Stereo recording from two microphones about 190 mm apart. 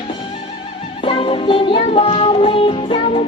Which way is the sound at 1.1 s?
25° left (ahead or behind).